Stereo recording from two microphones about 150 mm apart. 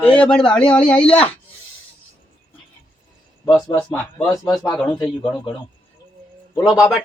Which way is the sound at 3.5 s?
25° left (ahead or behind).